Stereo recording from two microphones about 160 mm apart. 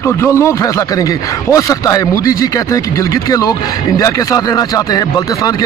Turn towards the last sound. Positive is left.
turn(degrees=25)  # may be behind; listen again after turning